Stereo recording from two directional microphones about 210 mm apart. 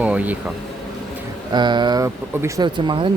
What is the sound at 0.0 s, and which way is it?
Vehicle, 5° right (ahead or behind).